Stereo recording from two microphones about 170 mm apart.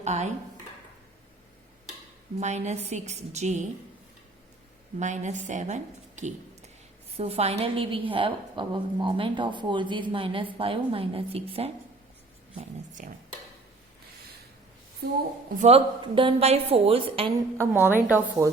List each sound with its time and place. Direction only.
0.0 s speech: 40° right (ahead or behind)
2.4 s a woman's voice: 40° right (ahead or behind)
4.9 s a woman's voice: 45° right (ahead or behind)
13.0 s a woman's voice: 50° right (ahead or behind)
15.5 s a woman's voice: 40° right (ahead or behind)
16.0 s a woman's voice: 30° right (ahead or behind)
17.8 s speech: 10° right (ahead or behind)